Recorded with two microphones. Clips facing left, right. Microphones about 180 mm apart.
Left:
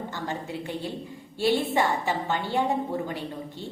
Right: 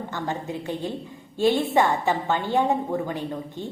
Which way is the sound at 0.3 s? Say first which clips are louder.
Right 4 dB; 20° right (ahead or behind).